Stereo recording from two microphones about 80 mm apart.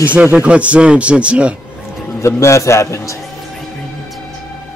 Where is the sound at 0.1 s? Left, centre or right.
Centre.